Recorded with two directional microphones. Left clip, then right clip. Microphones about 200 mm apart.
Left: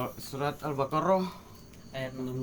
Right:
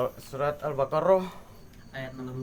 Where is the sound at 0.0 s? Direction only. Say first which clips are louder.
Right 5 dB; 30° right (ahead or behind).